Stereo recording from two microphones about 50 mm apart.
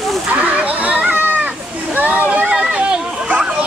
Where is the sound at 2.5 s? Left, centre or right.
Centre.